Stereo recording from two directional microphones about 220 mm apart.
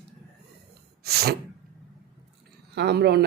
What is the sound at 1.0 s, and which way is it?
Speech, 45° right (ahead or behind).